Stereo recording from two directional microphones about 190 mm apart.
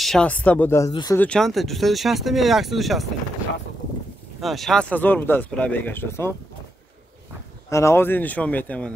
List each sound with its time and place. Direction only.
0.0 s speech: 5° left (ahead or behind); by 1.2 s 20° left (ahead or behind)
1.2 s speech: 5° left (ahead or behind)
4.4 s speech: centre (ahead or behind)
7.7 s speech: 15° left (ahead or behind)